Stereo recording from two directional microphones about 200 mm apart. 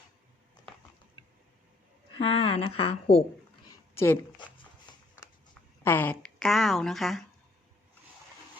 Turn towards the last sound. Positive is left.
turn(degrees=0)  # may be behind; listen again after turning